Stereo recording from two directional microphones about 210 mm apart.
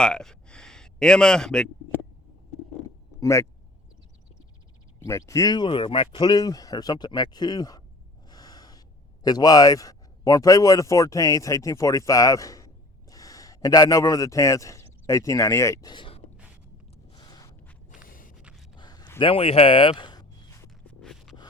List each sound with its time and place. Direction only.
0.0 s speech: 5° left (ahead or behind)
3.2 s speech: 15° left (ahead or behind)
4.9 s speech: 15° left (ahead or behind)
8.3 s gasp: 20° left (ahead or behind)
9.2 s a man's voice: 20° left (ahead or behind)
17.1 s a sound: 20° left (ahead or behind)
17.9 s a sound: 40° left (ahead or behind)
18.8 s a sound: 20° left (ahead or behind)
21.0 s scrape: centre (ahead or behind)